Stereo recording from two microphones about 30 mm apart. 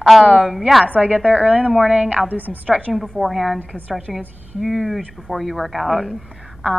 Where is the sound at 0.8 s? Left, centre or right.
Right.